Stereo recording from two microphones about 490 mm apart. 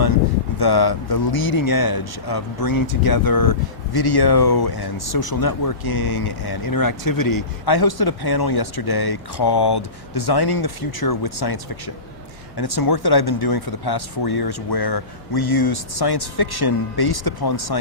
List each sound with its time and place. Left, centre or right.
0.6 s speech: left